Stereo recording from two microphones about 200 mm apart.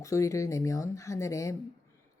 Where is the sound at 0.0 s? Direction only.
15° left (ahead or behind).